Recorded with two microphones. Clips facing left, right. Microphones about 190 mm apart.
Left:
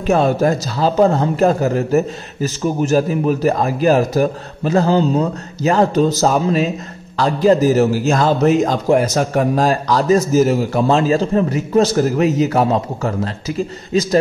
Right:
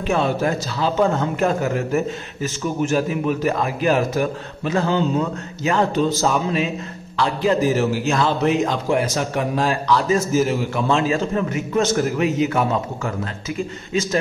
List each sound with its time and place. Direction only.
0.0 s a man's voice: 40° left (ahead or behind)